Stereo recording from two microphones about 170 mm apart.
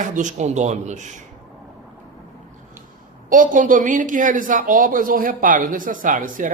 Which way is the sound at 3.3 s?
50° right (ahead or behind).